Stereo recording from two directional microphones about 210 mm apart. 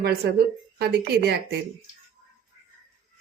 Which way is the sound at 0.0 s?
50° right (ahead or behind).